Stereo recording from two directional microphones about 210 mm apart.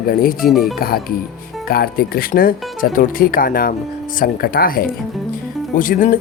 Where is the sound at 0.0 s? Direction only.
45° left (ahead or behind).